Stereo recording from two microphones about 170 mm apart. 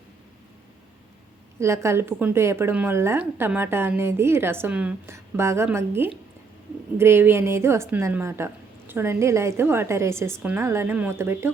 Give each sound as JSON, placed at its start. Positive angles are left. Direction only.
{"t": 1.5, "sound": "speech", "side_deg": -15}